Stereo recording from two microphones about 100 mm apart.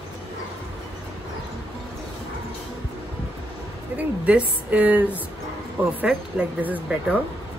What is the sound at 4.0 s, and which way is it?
A woman's voice, 15° right (ahead or behind).